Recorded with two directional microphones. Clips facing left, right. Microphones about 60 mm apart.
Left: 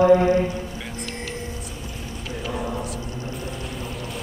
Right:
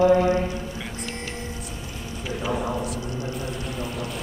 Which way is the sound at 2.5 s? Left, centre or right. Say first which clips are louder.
Even; centre.